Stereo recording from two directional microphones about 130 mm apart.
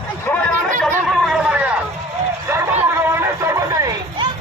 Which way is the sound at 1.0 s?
Centre (ahead or behind).